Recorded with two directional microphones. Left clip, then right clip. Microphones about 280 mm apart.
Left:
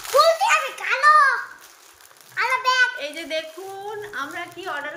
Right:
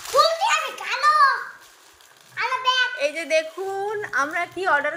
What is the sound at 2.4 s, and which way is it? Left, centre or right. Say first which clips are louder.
Children playing: left 2 dB; left.